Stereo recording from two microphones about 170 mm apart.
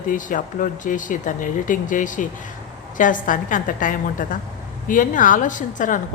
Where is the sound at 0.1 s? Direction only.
50° left (ahead or behind).